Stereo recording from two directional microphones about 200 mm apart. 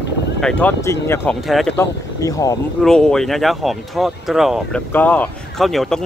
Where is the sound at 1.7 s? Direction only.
15° left (ahead or behind).